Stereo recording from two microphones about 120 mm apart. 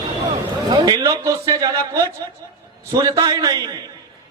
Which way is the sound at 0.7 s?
35° right (ahead or behind).